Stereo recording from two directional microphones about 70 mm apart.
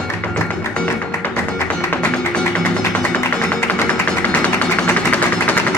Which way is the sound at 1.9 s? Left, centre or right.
Centre.